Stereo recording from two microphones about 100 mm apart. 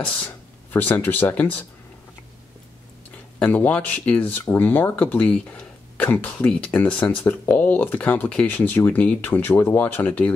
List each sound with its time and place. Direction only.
0.0 s speech: 15° left (ahead or behind)
3.3 s speech: 15° left (ahead or behind)